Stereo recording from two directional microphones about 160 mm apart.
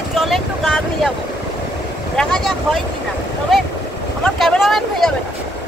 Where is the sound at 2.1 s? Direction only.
5° left (ahead or behind).